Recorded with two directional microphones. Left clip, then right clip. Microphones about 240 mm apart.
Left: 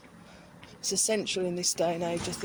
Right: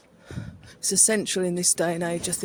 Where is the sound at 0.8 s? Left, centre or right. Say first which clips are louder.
Right 5 dB; right.